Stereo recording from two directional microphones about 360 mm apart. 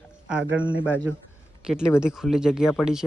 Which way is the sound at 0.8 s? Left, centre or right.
Centre.